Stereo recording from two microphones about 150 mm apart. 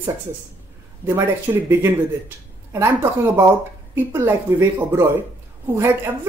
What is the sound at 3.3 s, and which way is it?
Speech, 15° right (ahead or behind).